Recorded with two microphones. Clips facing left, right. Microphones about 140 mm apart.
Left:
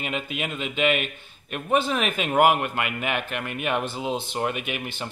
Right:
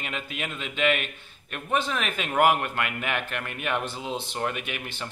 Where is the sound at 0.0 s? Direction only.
10° left (ahead or behind).